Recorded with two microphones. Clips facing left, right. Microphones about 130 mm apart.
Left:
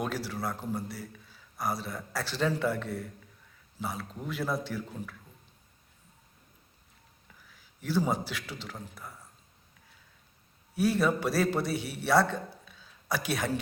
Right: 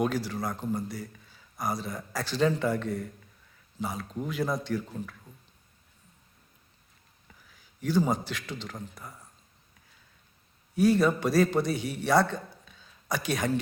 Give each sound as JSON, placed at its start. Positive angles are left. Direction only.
{"t": 0.0, "sound": "a man's voice", "side_deg": 0}
{"t": 7.4, "sound": "a man's voice", "side_deg": 0}
{"t": 10.8, "sound": "a man's voice", "side_deg": 5}